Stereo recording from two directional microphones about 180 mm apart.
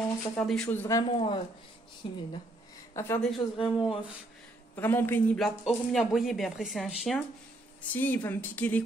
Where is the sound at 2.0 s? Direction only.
30° left (ahead or behind).